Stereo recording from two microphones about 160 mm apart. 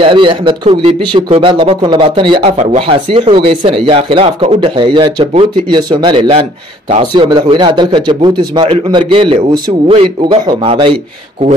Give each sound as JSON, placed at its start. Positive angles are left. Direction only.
{"t": 0.0, "sound": "a man's voice", "side_deg": -30}
{"t": 10.4, "sound": "a man's voice", "side_deg": -25}